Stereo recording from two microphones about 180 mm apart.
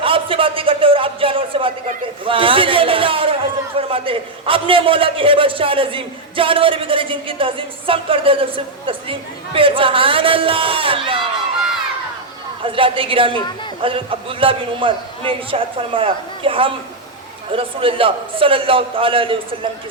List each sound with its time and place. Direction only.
0.0 s a sound: 30° right (ahead or behind)
2.2 s a man's voice: 30° right (ahead or behind)
12.6 s a man's voice: 30° right (ahead or behind)